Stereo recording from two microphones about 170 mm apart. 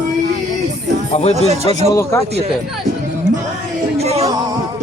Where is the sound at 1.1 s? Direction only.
35° left (ahead or behind).